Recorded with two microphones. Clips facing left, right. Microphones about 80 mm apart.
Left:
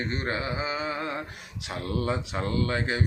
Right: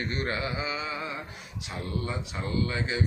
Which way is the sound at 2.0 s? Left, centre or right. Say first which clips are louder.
Left 6 dB; left.